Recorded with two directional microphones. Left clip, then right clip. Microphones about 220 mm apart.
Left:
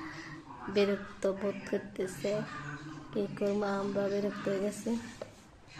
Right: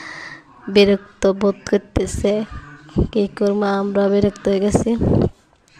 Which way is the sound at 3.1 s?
40° right (ahead or behind).